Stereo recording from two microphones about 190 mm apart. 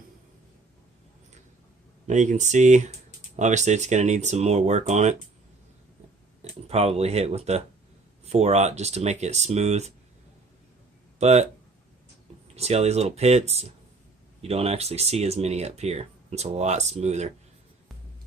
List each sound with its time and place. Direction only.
2.0 s speech: 40° right (ahead or behind)
6.5 s speech: 35° right (ahead or behind)
11.2 s speech: 35° right (ahead or behind)
12.5 s speech: 35° right (ahead or behind)